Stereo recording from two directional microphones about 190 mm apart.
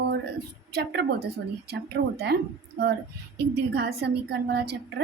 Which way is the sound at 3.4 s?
60° right (ahead or behind).